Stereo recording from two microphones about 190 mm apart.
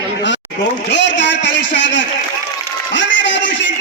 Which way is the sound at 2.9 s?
70° left (ahead or behind).